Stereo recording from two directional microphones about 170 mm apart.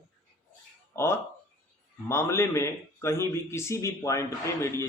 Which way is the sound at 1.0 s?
15° left (ahead or behind).